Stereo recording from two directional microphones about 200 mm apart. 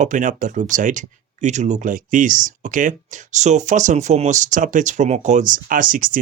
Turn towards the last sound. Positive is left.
turn(degrees=-40)  # may be behind; listen again after turning